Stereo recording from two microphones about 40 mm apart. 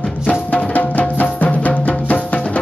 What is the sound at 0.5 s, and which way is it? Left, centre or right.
Music, left.